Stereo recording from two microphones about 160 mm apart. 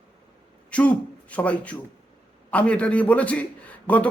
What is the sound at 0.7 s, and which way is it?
A man's voice, 10° left (ahead or behind).